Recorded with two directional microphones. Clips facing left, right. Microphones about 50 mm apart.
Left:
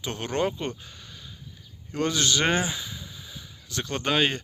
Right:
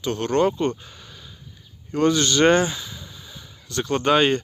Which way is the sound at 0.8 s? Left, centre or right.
Centre.